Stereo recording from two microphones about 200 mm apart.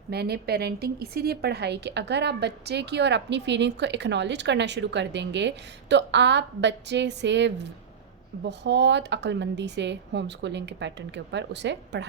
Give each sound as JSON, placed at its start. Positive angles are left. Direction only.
{"t": 0.1, "sound": "a woman's voice", "side_deg": -55}